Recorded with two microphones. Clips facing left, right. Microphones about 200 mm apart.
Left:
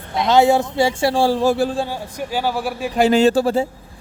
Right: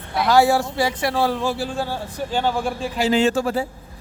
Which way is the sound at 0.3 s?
20° left (ahead or behind).